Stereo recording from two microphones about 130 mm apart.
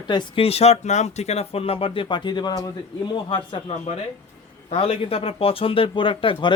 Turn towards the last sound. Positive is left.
turn(degrees=40)  # may be behind; listen again after turning